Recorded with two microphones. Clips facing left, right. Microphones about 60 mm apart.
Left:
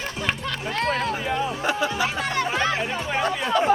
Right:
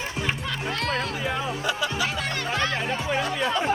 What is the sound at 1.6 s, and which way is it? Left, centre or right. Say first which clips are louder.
Music: left 3 dB; left.